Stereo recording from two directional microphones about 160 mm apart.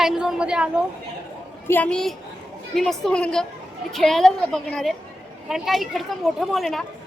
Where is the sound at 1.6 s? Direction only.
10° left (ahead or behind).